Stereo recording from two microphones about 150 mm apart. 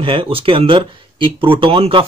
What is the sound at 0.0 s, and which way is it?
Speech, 35° right (ahead or behind).